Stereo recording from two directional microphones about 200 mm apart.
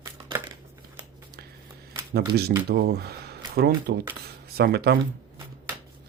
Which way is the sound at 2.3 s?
50° right (ahead or behind).